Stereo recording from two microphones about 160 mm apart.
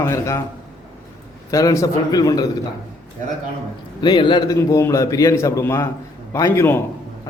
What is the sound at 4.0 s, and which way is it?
A man's voice, 30° left (ahead or behind).